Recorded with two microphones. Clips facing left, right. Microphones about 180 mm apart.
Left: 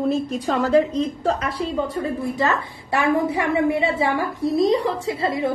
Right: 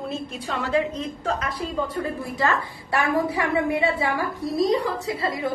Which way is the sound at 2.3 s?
20° left (ahead or behind).